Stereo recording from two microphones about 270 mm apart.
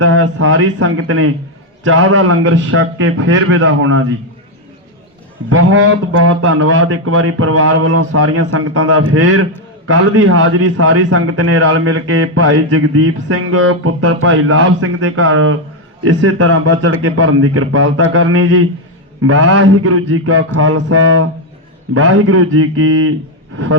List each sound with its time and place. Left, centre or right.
0.0 s a man's voice: right
5.5 s a man's voice: right